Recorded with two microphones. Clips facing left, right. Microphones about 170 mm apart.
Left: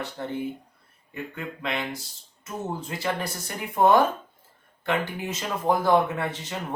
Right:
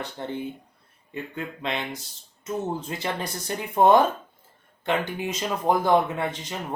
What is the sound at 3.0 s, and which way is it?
Speech, 20° right (ahead or behind).